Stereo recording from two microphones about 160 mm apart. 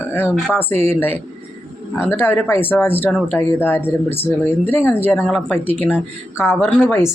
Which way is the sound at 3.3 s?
15° left (ahead or behind).